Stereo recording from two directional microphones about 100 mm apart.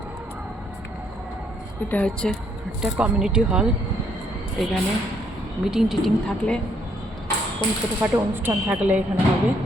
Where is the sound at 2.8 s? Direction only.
5° right (ahead or behind).